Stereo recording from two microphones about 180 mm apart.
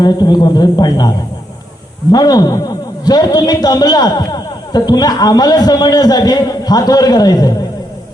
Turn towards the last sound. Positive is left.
turn(degrees=20)  # may be behind; listen again after turning